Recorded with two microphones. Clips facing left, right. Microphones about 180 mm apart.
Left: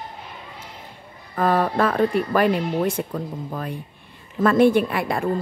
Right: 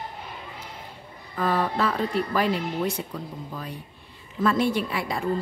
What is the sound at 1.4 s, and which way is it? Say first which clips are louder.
A woman's voice: left 5 dB; 55° left (ahead or behind).